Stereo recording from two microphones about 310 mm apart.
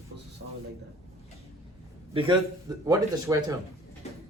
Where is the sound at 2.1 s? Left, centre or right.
Centre.